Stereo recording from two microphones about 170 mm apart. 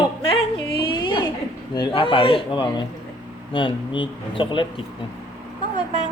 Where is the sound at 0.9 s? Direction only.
25° left (ahead or behind).